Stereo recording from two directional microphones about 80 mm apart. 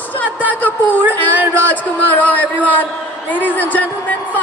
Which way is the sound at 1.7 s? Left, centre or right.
Left.